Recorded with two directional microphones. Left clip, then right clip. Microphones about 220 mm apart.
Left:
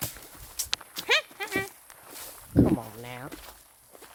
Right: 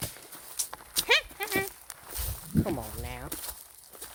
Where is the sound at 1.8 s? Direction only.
40° right (ahead or behind).